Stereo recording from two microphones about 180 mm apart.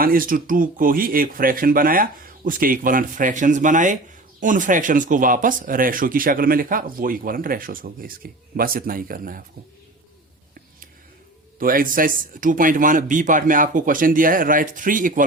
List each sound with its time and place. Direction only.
0.0 s speech: 50° right (ahead or behind)
11.6 s speech: 50° right (ahead or behind)